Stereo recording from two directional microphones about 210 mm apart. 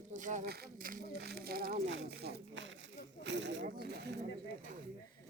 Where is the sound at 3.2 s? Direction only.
55° right (ahead or behind).